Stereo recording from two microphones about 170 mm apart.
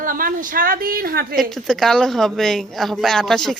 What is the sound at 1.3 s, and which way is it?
A woman's voice, centre (ahead or behind).